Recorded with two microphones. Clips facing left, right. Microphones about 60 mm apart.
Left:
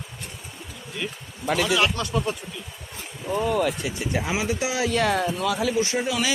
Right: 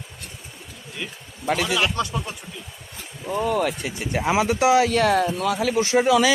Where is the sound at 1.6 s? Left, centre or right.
Centre.